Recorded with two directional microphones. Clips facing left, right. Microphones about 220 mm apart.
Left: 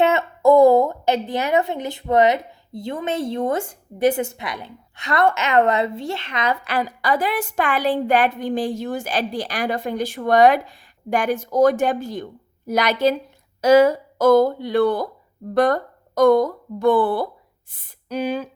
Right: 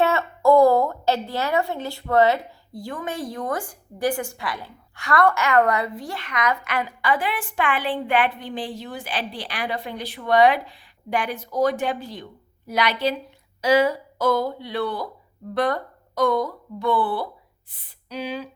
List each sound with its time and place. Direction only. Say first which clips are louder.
0.0 s a woman's voice: left 3 dB; 20° left (ahead or behind); by 18.4 s 45° left (ahead or behind)